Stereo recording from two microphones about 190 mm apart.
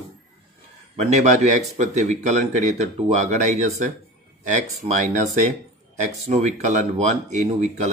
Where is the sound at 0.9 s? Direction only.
35° right (ahead or behind).